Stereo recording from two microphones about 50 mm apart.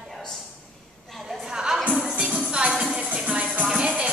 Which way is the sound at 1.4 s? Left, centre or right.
Centre.